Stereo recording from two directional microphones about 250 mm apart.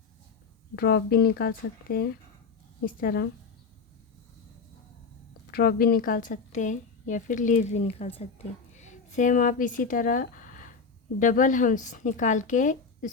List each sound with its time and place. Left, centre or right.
0.8 s a woman's voice: left
5.5 s a woman's voice: left